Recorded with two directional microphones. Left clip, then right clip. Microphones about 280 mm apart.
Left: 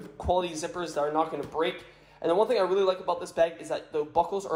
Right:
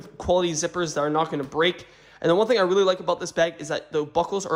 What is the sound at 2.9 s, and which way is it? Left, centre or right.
Speech, right.